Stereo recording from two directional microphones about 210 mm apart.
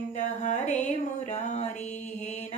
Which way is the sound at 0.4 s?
35° left (ahead or behind).